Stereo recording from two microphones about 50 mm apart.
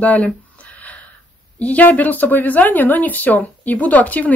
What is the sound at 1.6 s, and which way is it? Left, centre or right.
Speech, left.